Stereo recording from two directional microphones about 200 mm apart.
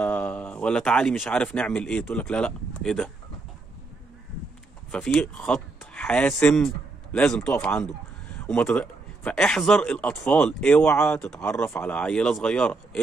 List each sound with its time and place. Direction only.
0.0 s speech: 10° left (ahead or behind)
4.9 s a man's voice: 5° left (ahead or behind)